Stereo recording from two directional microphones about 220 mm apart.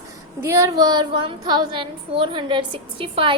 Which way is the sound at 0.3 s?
10° right (ahead or behind).